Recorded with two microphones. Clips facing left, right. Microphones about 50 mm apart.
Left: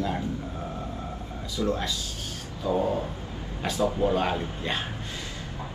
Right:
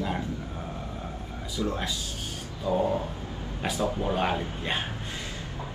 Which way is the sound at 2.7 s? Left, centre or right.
Right.